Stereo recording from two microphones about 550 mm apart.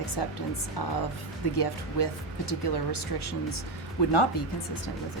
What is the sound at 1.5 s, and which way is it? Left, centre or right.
Speech, left.